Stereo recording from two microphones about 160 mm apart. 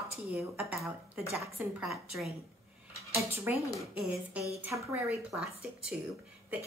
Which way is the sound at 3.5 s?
10° right (ahead or behind).